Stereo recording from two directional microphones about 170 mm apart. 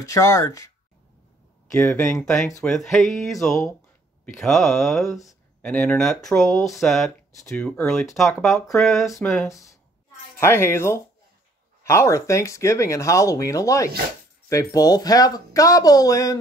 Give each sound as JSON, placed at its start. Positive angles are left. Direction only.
{"t": 0.0, "sound": "speech", "side_deg": 20}
{"t": 1.7, "sound": "speech", "side_deg": 15}
{"t": 2.2, "sound": "speech", "side_deg": 5}
{"t": 10.4, "sound": "speech", "side_deg": 15}